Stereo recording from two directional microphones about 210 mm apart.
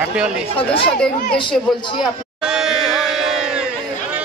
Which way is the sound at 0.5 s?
25° left (ahead or behind).